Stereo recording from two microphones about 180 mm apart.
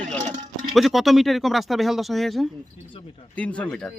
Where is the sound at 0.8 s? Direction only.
Centre (ahead or behind).